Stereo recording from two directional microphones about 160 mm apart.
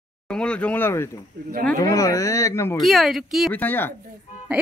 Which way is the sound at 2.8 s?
Centre (ahead or behind).